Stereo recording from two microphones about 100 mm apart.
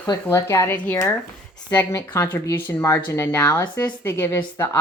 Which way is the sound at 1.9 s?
25° left (ahead or behind).